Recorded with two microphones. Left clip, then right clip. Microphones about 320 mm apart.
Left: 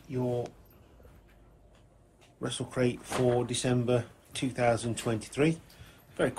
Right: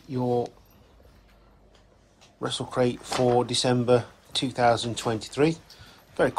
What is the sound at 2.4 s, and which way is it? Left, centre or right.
Speech, centre.